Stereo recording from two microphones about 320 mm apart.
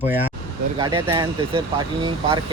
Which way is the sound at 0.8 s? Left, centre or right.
Centre.